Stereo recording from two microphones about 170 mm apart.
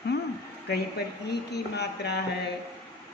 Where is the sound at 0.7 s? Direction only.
75° left (ahead or behind).